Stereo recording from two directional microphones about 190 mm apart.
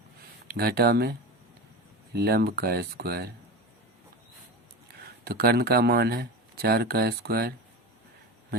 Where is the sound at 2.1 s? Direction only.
55° right (ahead or behind).